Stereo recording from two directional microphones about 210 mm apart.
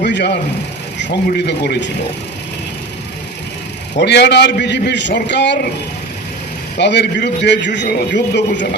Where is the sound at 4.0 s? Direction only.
55° left (ahead or behind).